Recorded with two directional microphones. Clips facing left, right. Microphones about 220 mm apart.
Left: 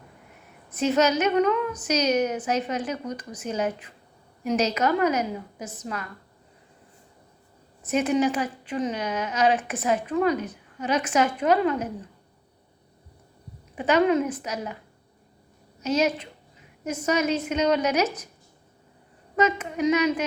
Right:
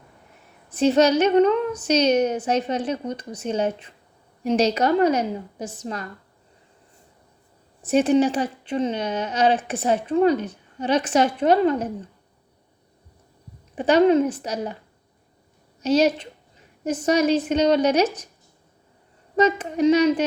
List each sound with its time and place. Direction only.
0.7 s a woman's voice: 30° right (ahead or behind)
7.8 s a woman's voice: 30° right (ahead or behind)
13.7 s a woman's voice: 30° right (ahead or behind)
15.8 s a woman's voice: 30° right (ahead or behind)
19.4 s a woman's voice: 30° right (ahead or behind)